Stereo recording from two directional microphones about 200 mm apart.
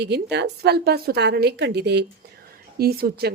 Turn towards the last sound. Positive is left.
turn(degrees=-50)  # may be behind; listen again after turning